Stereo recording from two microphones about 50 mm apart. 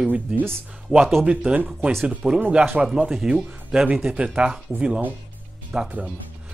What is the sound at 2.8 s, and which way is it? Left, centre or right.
Speech, centre.